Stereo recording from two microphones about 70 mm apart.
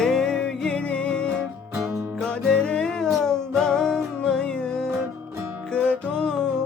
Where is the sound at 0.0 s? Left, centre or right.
Centre.